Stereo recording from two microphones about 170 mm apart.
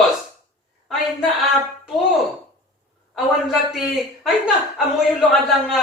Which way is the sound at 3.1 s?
Centre (ahead or behind).